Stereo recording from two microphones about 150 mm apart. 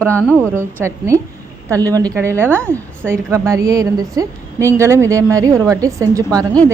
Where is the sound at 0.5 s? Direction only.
15° right (ahead or behind).